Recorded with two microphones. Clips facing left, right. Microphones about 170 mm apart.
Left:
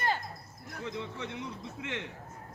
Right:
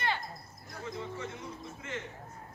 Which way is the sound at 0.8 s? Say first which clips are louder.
Left 1 dB; 70° left (ahead or behind).